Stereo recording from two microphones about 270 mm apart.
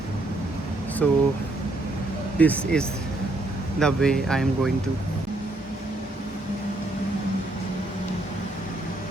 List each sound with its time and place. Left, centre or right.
1.0 s speech: centre
2.4 s speech: centre